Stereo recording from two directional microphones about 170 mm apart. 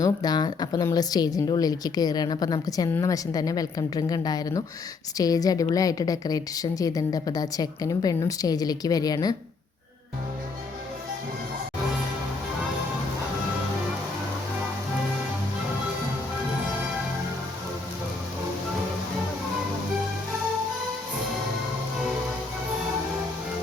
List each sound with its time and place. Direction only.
0.0 s a woman's voice: 25° left (ahead or behind)